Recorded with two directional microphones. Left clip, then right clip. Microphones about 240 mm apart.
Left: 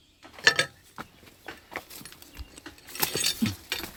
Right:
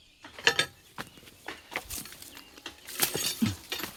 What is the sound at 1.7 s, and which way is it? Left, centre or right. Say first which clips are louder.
Keys jangling: right 2 dB; centre.